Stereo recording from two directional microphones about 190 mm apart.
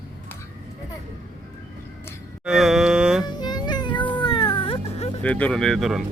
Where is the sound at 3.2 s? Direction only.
20° left (ahead or behind).